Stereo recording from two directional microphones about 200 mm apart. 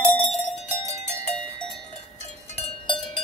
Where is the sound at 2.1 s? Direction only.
30° left (ahead or behind).